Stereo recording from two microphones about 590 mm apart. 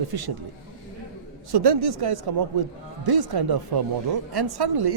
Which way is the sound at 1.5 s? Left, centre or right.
Right.